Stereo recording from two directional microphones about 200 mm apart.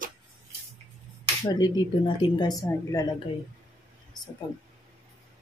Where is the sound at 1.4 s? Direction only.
20° left (ahead or behind).